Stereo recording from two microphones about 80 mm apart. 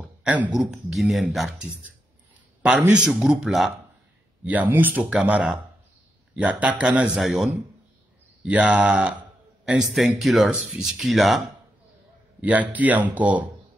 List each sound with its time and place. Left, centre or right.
0.0 s a sound: centre
0.6 s speech: centre
2.6 s a man's voice: centre
4.5 s a man's voice: right
7.2 s speech: centre
8.5 s a man's voice: centre
9.9 s speech: centre
12.4 s speech: centre